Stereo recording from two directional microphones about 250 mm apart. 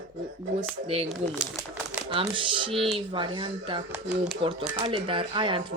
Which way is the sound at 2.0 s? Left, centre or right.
Right.